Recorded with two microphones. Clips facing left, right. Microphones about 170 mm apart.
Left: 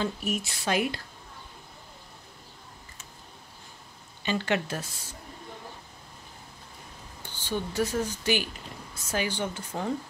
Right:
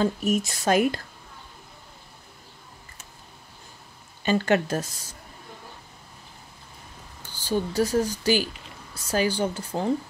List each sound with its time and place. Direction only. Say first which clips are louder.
0.0 s speech: right 7 dB; 45° right (ahead or behind)
4.2 s speech: right 6 dB; 45° right (ahead or behind)
7.3 s speech: right 5 dB; 40° right (ahead or behind)